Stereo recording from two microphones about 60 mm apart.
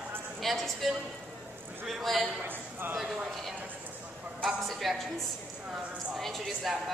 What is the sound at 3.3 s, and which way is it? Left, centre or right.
Speech, centre.